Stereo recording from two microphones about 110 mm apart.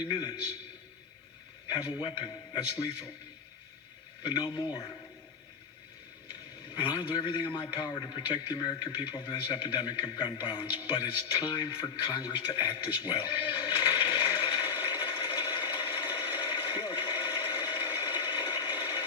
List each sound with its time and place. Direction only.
0.1 s a man's voice: 40° left (ahead or behind)
1.7 s a man's voice: 35° left (ahead or behind)
2.7 s a man's voice: 30° left (ahead or behind)
4.2 s a man's voice: 40° left (ahead or behind)
6.7 s a sound: 45° left (ahead or behind)